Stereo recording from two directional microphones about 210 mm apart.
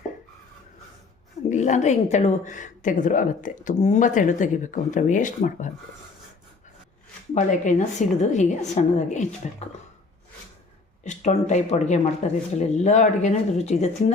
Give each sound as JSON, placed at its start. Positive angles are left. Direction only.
{"t": 1.5, "sound": "a woman's voice", "side_deg": 35}
{"t": 7.3, "sound": "a woman's voice", "side_deg": 35}
{"t": 11.0, "sound": "a woman's voice", "side_deg": 35}